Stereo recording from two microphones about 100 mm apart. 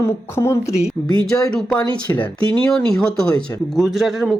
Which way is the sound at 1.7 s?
15° left (ahead or behind).